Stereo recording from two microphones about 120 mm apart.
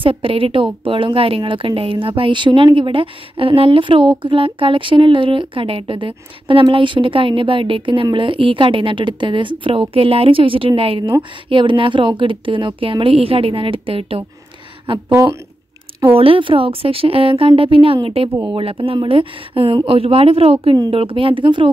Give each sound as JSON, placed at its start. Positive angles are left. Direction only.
{"t": 0.0, "sound": "a woman's voice", "side_deg": -50}
{"t": 15.0, "sound": "speech", "side_deg": -20}
{"t": 16.2, "sound": "a woman's voice", "side_deg": -45}